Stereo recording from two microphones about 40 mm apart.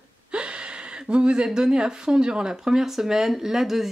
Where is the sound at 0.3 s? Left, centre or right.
Right.